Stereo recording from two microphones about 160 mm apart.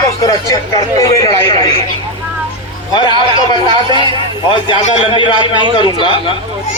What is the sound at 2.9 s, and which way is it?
A man's voice, 30° left (ahead or behind).